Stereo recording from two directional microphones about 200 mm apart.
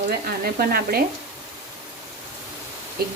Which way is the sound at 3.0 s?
50° right (ahead or behind).